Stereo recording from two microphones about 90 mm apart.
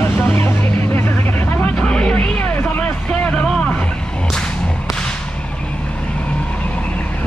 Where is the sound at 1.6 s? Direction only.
10° left (ahead or behind).